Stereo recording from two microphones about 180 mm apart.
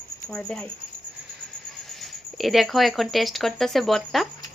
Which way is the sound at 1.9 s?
Centre (ahead or behind).